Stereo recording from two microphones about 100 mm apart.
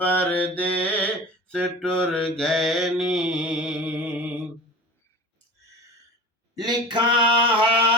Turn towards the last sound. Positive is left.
turn(degrees=-60)  # may be behind; listen again after turning